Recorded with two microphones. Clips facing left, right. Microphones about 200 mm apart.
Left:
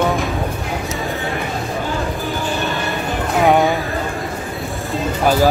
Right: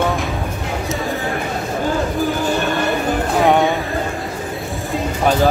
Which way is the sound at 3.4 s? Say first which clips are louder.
Left 1 dB; centre (ahead or behind).